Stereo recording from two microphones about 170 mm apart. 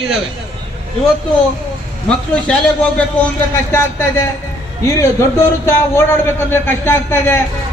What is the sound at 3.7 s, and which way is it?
A man's voice, 15° left (ahead or behind).